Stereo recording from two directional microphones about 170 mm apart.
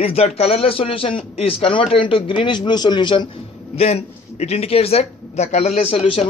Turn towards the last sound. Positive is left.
turn(degrees=35)  # may be behind; listen again after turning